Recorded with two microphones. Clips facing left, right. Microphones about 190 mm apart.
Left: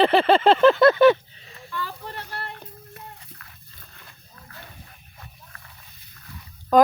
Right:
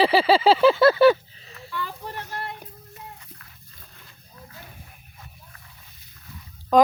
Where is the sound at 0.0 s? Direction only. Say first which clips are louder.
Left 1 dB; centre (ahead or behind).